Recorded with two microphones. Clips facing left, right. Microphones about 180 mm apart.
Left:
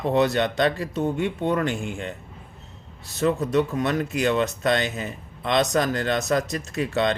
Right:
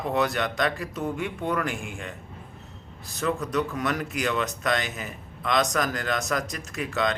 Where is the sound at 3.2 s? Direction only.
25° left (ahead or behind).